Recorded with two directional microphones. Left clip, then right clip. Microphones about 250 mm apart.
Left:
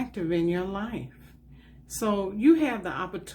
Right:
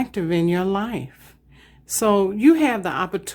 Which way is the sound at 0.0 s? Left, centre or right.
Right.